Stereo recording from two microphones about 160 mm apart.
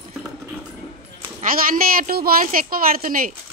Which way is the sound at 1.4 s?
60° right (ahead or behind).